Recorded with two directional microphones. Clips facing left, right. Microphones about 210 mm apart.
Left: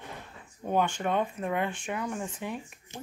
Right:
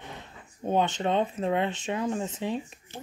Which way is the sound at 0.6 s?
20° right (ahead or behind).